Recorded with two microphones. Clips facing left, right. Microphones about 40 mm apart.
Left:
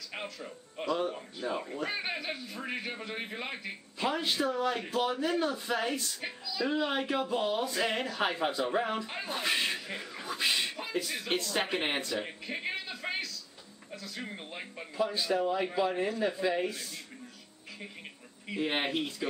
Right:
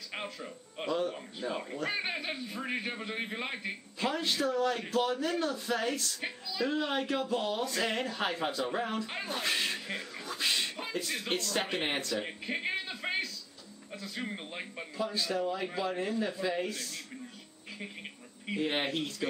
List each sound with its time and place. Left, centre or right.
0.1 s a man's voice: centre
4.0 s speech: centre
9.0 s speech: centre
9.3 s speech: centre
12.3 s a man's voice: centre
12.8 s a sound: centre
14.0 s a man's voice: centre
15.0 s speech: centre
18.6 s speech: centre